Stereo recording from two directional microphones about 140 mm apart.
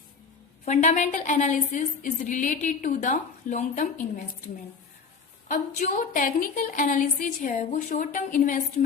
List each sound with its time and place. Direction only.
0.6 s a woman's voice: 55° left (ahead or behind)
5.5 s a woman's voice: 60° left (ahead or behind)